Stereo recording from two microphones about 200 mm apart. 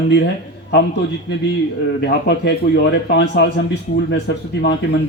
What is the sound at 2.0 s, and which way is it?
Speech, 55° left (ahead or behind).